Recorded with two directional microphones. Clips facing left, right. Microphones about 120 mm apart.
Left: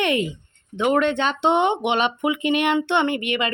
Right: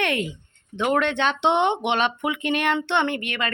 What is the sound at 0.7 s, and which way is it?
A woman's voice, 5° left (ahead or behind).